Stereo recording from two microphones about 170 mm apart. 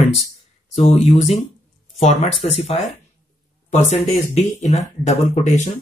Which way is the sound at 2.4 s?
40° left (ahead or behind).